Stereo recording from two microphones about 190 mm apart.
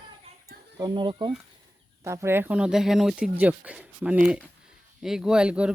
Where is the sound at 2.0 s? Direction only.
15° right (ahead or behind).